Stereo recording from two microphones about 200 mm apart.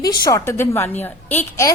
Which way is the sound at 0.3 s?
15° left (ahead or behind).